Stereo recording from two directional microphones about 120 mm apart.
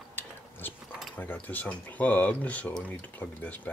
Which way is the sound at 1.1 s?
15° left (ahead or behind).